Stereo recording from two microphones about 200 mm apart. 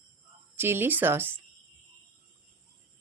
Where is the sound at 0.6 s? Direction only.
10° right (ahead or behind).